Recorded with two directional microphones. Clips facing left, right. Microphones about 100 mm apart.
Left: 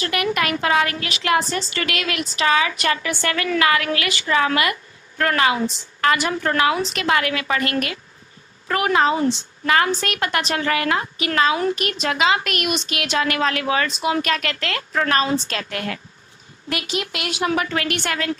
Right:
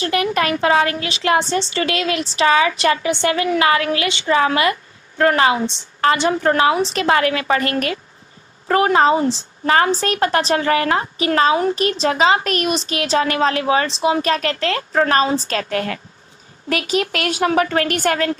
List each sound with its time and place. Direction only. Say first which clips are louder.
0.0 s a woman's voice: right 3 dB; 30° right (ahead or behind)